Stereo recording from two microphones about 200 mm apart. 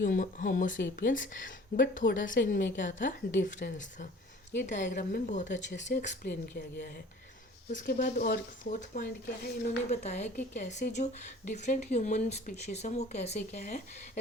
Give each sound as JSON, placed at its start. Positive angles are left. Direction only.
{"t": 0.0, "sound": "a woman's voice", "side_deg": 40}
{"t": 5.6, "sound": "speech", "side_deg": 60}
{"t": 6.0, "sound": "a woman's voice", "side_deg": 40}